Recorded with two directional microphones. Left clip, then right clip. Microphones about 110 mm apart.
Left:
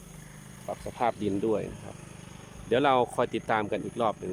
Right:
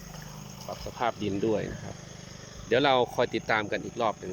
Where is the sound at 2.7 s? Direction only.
15° left (ahead or behind).